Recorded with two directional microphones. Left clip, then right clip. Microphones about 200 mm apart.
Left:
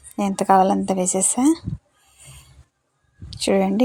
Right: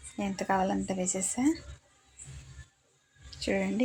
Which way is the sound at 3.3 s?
40° left (ahead or behind).